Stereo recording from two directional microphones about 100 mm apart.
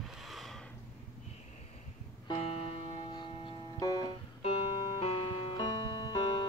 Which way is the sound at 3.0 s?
50° left (ahead or behind).